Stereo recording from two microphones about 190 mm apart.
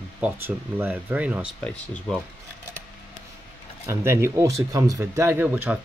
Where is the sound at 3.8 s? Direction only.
15° right (ahead or behind).